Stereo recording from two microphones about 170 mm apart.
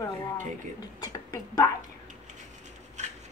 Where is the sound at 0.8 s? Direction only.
20° left (ahead or behind).